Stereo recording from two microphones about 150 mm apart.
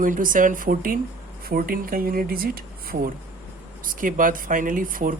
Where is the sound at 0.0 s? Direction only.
65° right (ahead or behind).